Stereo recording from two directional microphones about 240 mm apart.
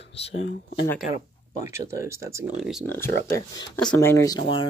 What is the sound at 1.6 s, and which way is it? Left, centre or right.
Speech, centre.